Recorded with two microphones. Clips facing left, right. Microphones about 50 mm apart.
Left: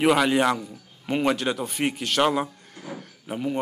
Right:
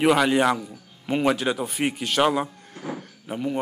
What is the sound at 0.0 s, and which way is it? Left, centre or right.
Speech, centre.